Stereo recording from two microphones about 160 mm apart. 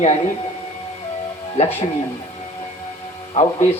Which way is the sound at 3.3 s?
40° left (ahead or behind).